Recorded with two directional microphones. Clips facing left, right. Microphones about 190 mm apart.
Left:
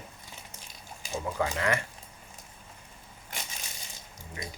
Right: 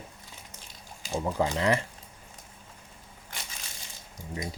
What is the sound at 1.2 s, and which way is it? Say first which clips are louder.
Speech: right 3 dB; 30° right (ahead or behind).